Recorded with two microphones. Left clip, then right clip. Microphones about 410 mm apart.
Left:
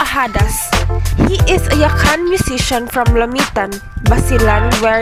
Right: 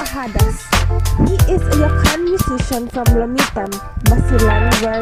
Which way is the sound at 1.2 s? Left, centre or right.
Left.